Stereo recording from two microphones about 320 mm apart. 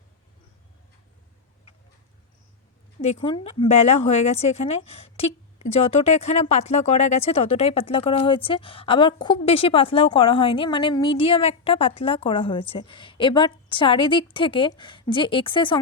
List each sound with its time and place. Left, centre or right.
3.0 s a woman's voice: centre